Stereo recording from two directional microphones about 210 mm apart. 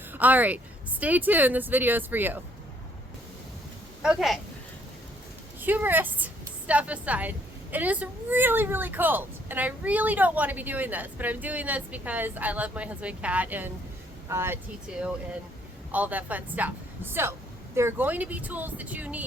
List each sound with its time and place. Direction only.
0.1 s speech: 10° right (ahead or behind)
4.0 s speech: centre (ahead or behind)
5.5 s a woman's voice: 10° right (ahead or behind)